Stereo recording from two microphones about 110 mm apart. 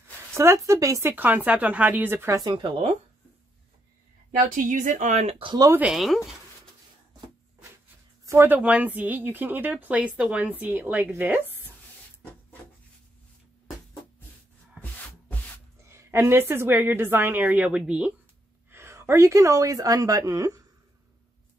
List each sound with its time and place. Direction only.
0.3 s a woman's voice: 25° right (ahead or behind)
2.5 s speech: 50° right (ahead or behind)
5.0 s speech: 85° right
5.8 s speech: 5° right (ahead or behind)
8.3 s a woman's voice: 20° right (ahead or behind)
14.8 s rub: 15° right (ahead or behind)
15.8 s a woman's voice: 25° right (ahead or behind); by 18.1 s 10° right (ahead or behind)
18.7 s speech: 25° right (ahead or behind)